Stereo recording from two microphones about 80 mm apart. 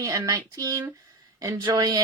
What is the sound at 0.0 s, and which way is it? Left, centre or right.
Speech, right.